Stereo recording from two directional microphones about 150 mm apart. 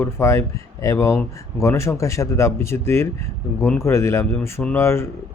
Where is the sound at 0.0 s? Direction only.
20° left (ahead or behind).